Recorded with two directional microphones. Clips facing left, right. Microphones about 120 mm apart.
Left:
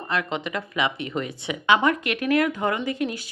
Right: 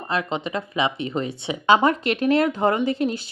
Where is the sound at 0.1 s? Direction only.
25° right (ahead or behind).